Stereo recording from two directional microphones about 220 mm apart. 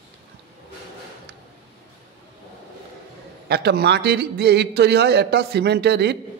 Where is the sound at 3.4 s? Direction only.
45° right (ahead or behind).